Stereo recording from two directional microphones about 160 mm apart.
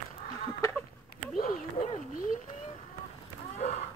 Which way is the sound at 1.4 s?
60° left (ahead or behind).